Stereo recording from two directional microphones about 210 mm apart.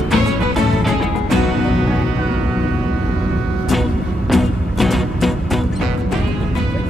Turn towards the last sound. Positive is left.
turn(degrees=0)  # may be behind; listen again after turning